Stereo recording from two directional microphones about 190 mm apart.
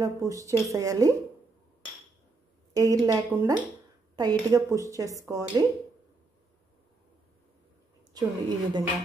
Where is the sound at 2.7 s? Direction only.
20° right (ahead or behind).